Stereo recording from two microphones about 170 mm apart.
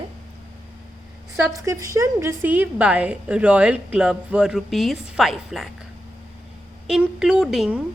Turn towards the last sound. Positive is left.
turn(degrees=-5)  # may be behind; listen again after turning